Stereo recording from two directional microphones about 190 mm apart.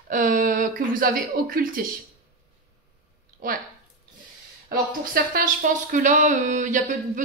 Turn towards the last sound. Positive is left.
turn(degrees=-40)  # may be behind; listen again after turning